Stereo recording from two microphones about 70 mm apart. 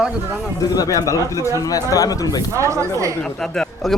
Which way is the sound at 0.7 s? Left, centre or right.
Left.